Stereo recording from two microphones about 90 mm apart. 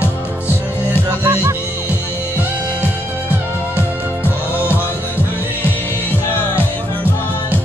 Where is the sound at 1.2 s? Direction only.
35° right (ahead or behind).